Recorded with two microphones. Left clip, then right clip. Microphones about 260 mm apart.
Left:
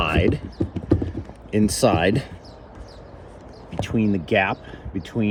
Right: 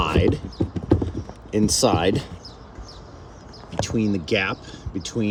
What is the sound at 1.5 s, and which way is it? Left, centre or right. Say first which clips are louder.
Speech: even; left.